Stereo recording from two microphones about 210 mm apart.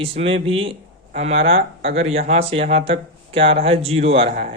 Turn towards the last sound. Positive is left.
turn(degrees=-30)  # may be behind; listen again after turning